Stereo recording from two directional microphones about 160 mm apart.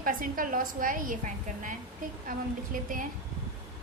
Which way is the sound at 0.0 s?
60° right (ahead or behind).